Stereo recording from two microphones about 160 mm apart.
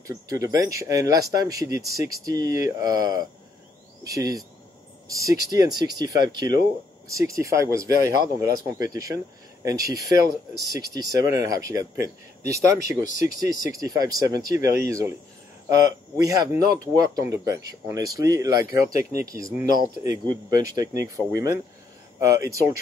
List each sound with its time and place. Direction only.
0.0 s speech: 20° right (ahead or behind)
4.0 s cricket: 20° right (ahead or behind)
5.0 s speech: 20° right (ahead or behind)
13.0 s speech: 55° left (ahead or behind)
13.5 s speech: 20° right (ahead or behind)
16.2 s speech: 25° right (ahead or behind)